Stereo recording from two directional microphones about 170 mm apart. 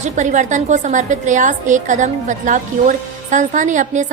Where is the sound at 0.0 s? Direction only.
45° right (ahead or behind).